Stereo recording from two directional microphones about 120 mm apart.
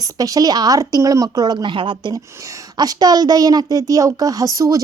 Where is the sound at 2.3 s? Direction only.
25° right (ahead or behind).